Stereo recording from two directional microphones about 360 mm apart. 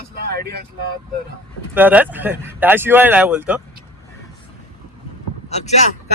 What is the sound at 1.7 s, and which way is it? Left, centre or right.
Speech, centre.